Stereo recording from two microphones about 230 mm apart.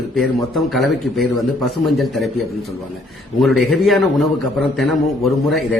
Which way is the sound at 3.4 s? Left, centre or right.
Centre.